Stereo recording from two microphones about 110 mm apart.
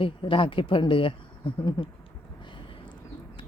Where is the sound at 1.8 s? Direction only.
40° left (ahead or behind).